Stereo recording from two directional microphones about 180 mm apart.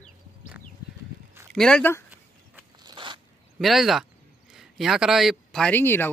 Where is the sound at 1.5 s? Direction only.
5° left (ahead or behind).